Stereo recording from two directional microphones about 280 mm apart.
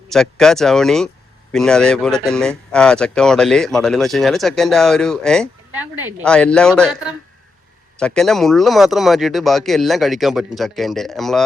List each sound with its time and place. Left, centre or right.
0.1 s speech: centre